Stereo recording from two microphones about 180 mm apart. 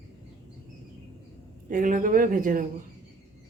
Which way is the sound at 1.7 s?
50° right (ahead or behind).